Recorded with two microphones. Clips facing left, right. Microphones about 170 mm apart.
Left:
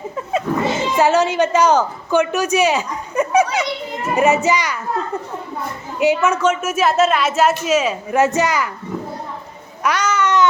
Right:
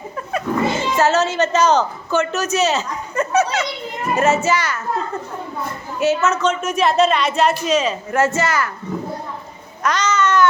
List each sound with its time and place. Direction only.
0.3 s speech: 15° left (ahead or behind)
6.0 s speech: 15° left (ahead or behind)
9.8 s speech: 10° left (ahead or behind)